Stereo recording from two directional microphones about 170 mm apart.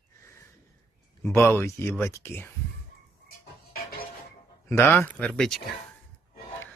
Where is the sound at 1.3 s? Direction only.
15° left (ahead or behind).